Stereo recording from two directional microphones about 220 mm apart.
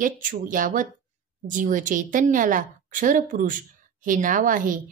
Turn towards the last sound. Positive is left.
turn(degrees=-35)  # may be behind; listen again after turning